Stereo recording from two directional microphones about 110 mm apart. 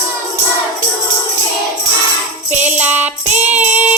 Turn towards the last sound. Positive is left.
turn(degrees=-15)  # may be behind; listen again after turning